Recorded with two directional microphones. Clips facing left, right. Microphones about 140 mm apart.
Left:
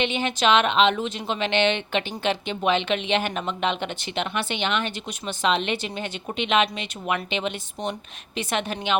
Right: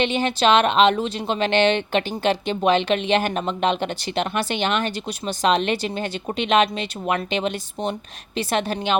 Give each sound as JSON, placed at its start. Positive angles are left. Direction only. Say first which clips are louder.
{"t": 0.0, "sound": "speech", "louder": "right 3 dB", "side_deg": -35}